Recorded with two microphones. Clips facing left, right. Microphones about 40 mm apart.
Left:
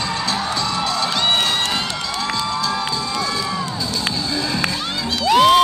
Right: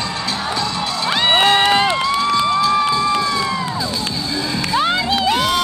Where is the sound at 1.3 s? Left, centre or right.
Right.